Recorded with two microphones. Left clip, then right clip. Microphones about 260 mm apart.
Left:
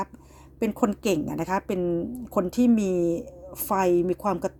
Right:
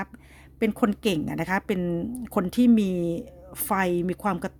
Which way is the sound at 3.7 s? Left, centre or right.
Right.